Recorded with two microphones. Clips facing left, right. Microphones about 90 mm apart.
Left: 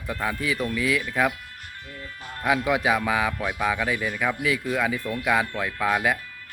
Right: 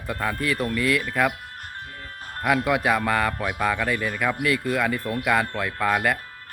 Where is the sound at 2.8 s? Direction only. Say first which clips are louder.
Right 1 dB; centre (ahead or behind).